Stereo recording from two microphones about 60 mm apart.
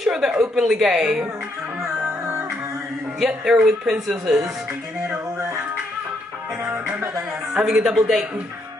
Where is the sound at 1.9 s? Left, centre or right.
Right.